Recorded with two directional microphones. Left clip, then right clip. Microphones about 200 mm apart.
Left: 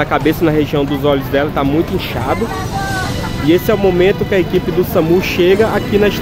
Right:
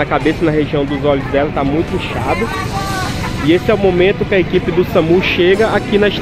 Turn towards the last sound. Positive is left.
turn(degrees=0)  # may be behind; listen again after turning